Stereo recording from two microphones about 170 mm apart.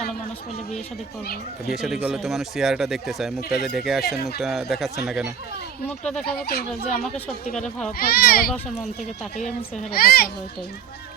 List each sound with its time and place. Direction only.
1.7 s speech: centre (ahead or behind)
6.2 s speech: 65° left (ahead or behind)
7.5 s speech: 5° left (ahead or behind)
7.9 s a child's voice: 65° left (ahead or behind)
9.4 s a woman's voice: 45° left (ahead or behind)
9.9 s a child's voice: 65° left (ahead or behind)